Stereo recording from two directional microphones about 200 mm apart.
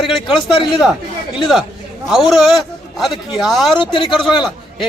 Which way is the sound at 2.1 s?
Centre (ahead or behind).